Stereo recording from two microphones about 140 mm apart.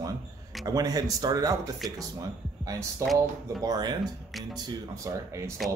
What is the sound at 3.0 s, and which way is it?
Speech, 20° right (ahead or behind).